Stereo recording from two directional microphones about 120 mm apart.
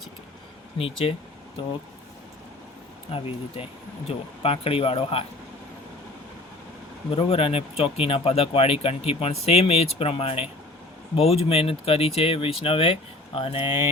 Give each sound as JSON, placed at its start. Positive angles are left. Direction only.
{"t": 0.8, "sound": "speech", "side_deg": 50}
{"t": 3.1, "sound": "speech", "side_deg": 50}
{"t": 7.1, "sound": "speech", "side_deg": 50}